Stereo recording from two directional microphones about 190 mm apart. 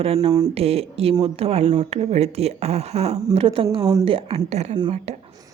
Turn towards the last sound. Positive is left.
turn(degrees=-30)  # may be behind; listen again after turning